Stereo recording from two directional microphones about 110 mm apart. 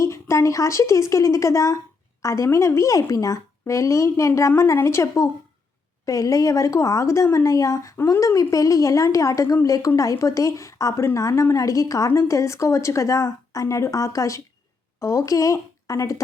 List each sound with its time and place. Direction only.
0.0 s speech: 25° left (ahead or behind)